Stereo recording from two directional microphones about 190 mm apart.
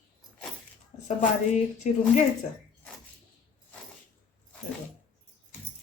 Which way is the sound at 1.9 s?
40° left (ahead or behind).